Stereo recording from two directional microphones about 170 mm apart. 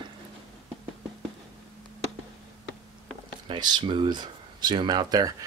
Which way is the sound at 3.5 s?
25° right (ahead or behind).